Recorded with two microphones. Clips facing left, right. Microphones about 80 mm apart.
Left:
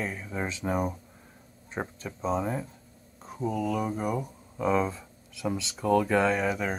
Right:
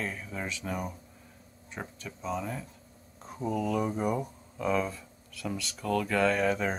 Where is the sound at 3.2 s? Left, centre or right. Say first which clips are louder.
Left 1 dB; centre.